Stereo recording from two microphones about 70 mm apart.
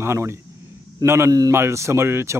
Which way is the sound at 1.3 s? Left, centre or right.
Right.